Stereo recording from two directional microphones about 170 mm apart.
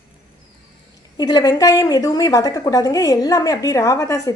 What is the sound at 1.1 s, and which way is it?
A woman's voice, 25° left (ahead or behind).